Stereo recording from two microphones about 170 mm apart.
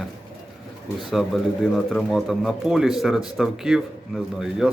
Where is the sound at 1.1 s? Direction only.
Centre (ahead or behind).